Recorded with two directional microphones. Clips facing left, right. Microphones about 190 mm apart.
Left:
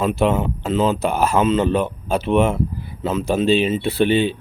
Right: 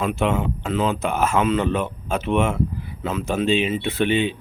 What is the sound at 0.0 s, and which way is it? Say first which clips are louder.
Speech: left 3 dB; 35° left (ahead or behind).